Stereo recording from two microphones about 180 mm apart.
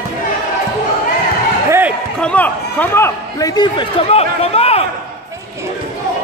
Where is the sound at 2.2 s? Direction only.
5° left (ahead or behind); by 4.9 s 35° left (ahead or behind).